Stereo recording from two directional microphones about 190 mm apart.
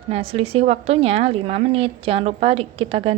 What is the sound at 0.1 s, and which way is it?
A woman's voice, 30° right (ahead or behind).